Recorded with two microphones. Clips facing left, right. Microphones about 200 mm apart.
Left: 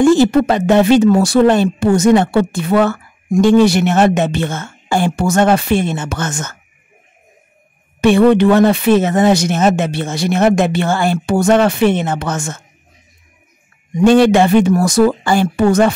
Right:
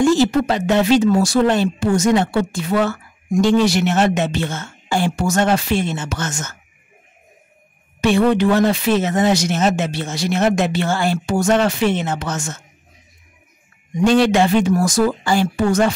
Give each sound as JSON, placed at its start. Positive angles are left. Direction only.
{"t": 0.0, "sound": "speech", "side_deg": 55}
{"t": 8.0, "sound": "speech", "side_deg": 60}
{"t": 14.0, "sound": "speech", "side_deg": 55}